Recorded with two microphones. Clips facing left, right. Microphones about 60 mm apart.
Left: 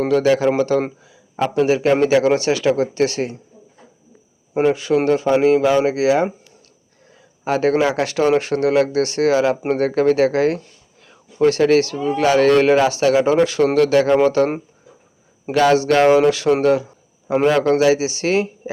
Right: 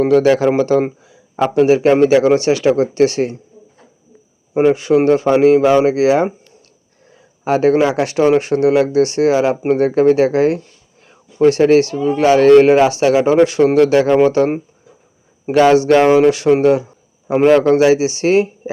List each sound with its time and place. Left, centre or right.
0.1 s a man's voice: right
4.7 s a man's voice: right
7.4 s speech: right
11.5 s speech: right
15.5 s speech: right